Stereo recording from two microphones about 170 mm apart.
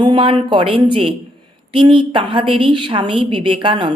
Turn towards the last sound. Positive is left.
turn(degrees=-30)  # may be behind; listen again after turning